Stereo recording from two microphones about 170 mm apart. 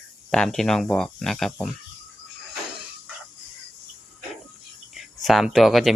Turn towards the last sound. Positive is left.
turn(degrees=0)  # may be behind; listen again after turning